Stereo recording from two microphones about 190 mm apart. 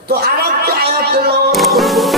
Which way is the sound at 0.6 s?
55° right (ahead or behind).